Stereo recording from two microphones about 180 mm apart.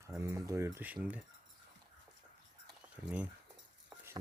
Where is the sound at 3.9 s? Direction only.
10° right (ahead or behind).